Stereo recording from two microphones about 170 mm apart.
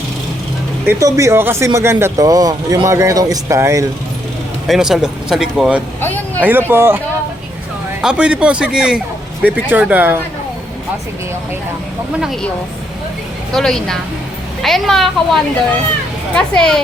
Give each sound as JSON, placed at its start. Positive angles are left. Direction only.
{"t": 0.9, "sound": "speech", "side_deg": -20}
{"t": 4.6, "sound": "speech", "side_deg": 0}
{"t": 6.0, "sound": "a sound", "side_deg": 10}
{"t": 6.4, "sound": "speech", "side_deg": -10}
{"t": 8.0, "sound": "speech", "side_deg": -5}
{"t": 13.5, "sound": "speech", "side_deg": 0}